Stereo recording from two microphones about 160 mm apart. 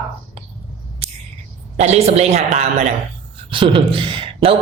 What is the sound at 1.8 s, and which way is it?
Speech, 40° right (ahead or behind).